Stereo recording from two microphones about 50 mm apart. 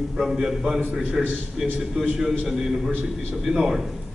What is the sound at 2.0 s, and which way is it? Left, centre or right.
A man's voice, centre.